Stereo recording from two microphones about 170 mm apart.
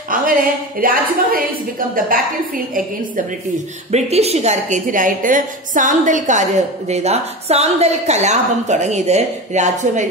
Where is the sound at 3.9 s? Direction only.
40° right (ahead or behind).